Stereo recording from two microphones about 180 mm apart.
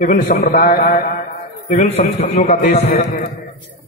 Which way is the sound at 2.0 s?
45° left (ahead or behind).